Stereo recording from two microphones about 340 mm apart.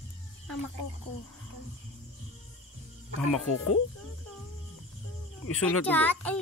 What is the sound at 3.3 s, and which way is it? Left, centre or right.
Speech, left.